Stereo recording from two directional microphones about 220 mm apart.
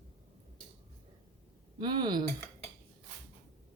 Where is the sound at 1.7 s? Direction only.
20° right (ahead or behind).